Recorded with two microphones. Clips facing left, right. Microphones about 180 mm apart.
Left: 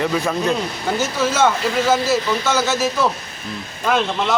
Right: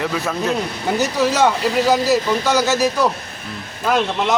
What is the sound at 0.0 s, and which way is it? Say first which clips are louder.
Speech: left 2 dB; centre (ahead or behind).